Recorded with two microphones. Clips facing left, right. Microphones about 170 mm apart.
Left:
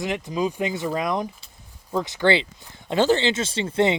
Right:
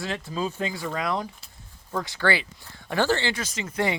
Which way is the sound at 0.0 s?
15° left (ahead or behind).